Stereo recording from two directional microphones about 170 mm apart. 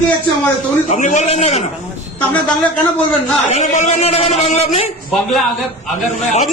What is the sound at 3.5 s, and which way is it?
A man's voice, 45° left (ahead or behind).